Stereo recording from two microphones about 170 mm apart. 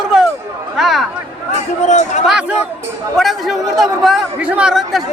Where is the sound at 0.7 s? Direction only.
Centre (ahead or behind).